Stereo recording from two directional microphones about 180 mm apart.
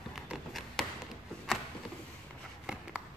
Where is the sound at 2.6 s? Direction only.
5° right (ahead or behind).